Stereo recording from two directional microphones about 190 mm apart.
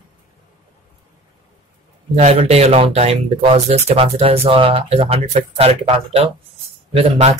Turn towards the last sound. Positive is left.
turn(degrees=-35)  # may be behind; listen again after turning